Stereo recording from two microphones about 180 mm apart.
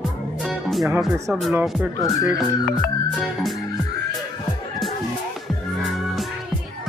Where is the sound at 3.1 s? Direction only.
Centre (ahead or behind).